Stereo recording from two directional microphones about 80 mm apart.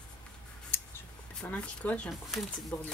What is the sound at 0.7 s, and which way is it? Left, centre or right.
Scissors, left.